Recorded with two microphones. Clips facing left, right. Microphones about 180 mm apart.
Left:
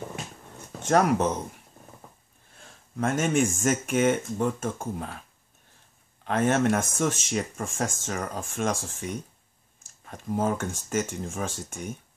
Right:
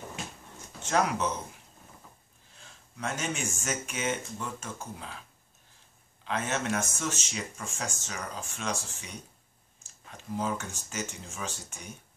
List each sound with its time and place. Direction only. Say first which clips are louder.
0.8 s speech: left 6 dB; 50° left (ahead or behind)
3.0 s speech: left 10 dB; 50° left (ahead or behind)
6.2 s speech: left 9 dB; 55° left (ahead or behind)